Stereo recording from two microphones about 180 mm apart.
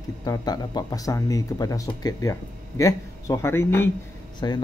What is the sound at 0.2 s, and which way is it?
Speech, 20° left (ahead or behind).